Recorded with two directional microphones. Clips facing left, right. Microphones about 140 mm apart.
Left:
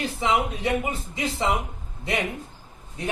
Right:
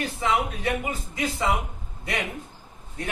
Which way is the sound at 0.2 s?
25° left (ahead or behind).